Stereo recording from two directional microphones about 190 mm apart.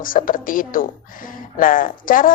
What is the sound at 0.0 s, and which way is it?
A woman's voice, 45° left (ahead or behind).